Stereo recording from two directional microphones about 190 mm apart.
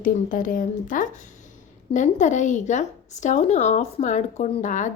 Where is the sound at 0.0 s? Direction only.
45° left (ahead or behind).